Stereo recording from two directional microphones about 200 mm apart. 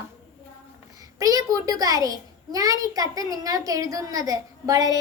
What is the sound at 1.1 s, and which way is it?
A woman's voice, 20° right (ahead or behind).